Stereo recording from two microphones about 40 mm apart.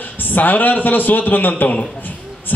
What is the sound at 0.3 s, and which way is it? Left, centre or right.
A man's voice, left.